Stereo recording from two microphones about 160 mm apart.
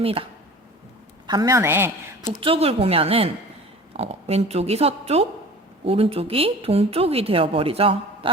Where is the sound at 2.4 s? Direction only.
35° right (ahead or behind).